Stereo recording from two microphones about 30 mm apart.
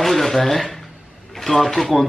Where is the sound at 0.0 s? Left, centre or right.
Centre.